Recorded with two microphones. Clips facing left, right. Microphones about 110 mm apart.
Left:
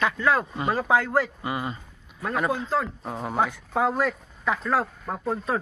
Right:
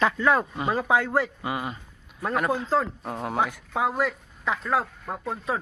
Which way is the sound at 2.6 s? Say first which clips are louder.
Right 2 dB; 30° right (ahead or behind).